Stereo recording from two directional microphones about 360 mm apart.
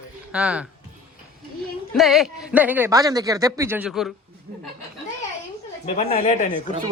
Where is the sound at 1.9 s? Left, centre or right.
Centre.